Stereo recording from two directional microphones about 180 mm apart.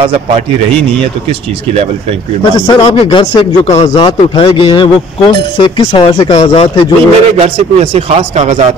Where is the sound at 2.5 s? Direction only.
20° left (ahead or behind).